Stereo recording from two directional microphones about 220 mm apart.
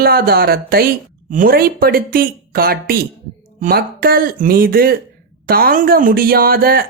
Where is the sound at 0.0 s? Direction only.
45° right (ahead or behind).